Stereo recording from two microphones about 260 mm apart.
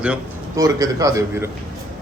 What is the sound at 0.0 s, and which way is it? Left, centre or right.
Speech, centre.